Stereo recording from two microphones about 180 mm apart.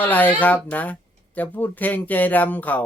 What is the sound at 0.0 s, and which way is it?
Speech, 10° left (ahead or behind).